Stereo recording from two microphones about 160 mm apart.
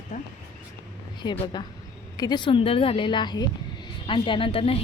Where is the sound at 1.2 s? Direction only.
30° left (ahead or behind).